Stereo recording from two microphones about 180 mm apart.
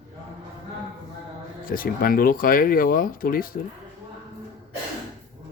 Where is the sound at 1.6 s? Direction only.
50° left (ahead or behind).